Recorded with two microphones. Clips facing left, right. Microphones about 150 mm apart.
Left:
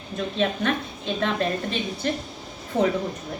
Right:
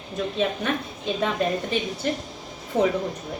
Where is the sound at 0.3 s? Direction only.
10° right (ahead or behind).